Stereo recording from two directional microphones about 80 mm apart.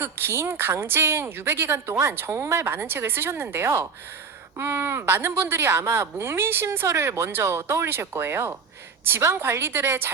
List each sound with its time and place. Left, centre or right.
0.0 s a woman's voice: right